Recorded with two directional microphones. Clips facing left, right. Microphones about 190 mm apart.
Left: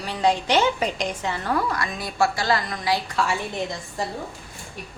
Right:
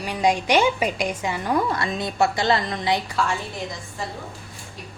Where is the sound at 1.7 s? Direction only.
25° right (ahead or behind).